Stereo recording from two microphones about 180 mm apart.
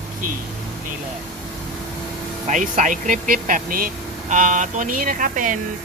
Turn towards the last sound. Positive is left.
turn(degrees=-45)  # may be behind; listen again after turning